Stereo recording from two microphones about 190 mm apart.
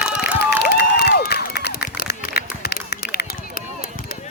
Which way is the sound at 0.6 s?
55° left (ahead or behind).